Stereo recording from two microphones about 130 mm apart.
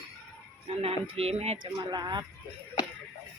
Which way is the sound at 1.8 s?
35° right (ahead or behind).